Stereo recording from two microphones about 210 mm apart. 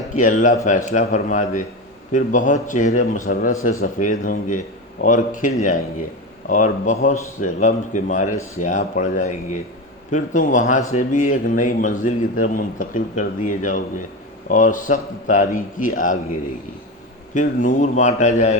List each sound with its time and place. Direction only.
0.2 s speech: 40° left (ahead or behind)
3.6 s a man's voice: 80° left
4.0 s speech: 40° left (ahead or behind)
17.3 s speech: 35° left (ahead or behind)